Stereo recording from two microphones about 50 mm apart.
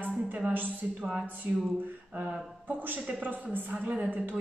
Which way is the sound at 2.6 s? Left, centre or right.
Right.